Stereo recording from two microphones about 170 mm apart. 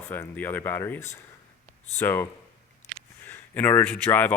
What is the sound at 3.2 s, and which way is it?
Speech, 10° left (ahead or behind).